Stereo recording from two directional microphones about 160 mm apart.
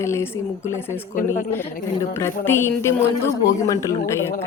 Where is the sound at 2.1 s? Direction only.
15° left (ahead or behind).